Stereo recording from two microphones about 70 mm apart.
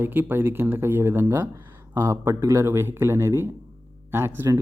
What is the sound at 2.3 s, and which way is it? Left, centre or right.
Speech, right.